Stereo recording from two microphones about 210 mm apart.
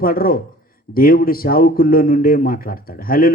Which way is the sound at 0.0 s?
45° left (ahead or behind).